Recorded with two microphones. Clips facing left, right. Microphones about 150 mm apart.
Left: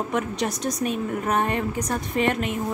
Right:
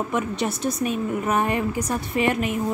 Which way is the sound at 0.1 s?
5° right (ahead or behind).